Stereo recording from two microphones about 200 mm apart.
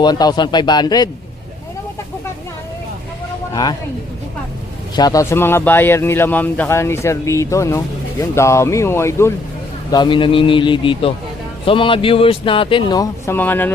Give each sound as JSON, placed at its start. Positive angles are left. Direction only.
{"t": 0.0, "sound": "a man's voice", "side_deg": 20}
{"t": 3.5, "sound": "speech", "side_deg": 20}
{"t": 4.9, "sound": "a man's voice", "side_deg": 20}
{"t": 9.9, "sound": "a man's voice", "side_deg": 25}